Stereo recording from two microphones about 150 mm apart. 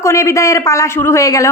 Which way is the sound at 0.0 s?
20° left (ahead or behind).